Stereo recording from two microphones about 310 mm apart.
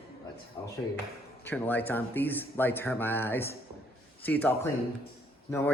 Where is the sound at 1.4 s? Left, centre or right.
Centre.